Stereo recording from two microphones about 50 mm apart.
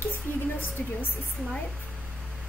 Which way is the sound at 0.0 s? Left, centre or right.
Left.